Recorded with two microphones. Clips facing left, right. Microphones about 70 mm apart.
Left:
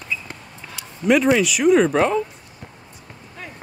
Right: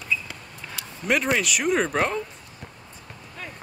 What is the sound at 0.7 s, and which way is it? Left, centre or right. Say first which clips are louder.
Speech: left 7 dB; centre.